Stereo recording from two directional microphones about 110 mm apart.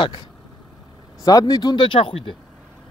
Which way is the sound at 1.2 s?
35° left (ahead or behind).